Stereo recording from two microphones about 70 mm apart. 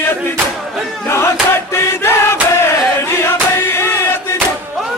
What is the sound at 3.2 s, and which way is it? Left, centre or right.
Music, left.